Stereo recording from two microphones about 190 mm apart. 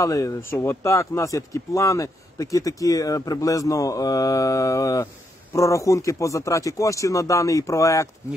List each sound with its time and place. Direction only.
0.0 s speech: 15° left (ahead or behind)